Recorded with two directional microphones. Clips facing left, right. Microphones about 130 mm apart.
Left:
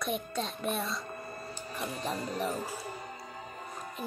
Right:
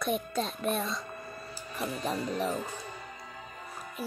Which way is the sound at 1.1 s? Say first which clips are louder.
Left 1 dB; 35° left (ahead or behind).